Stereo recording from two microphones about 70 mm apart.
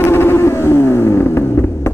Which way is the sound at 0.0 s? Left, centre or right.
Left.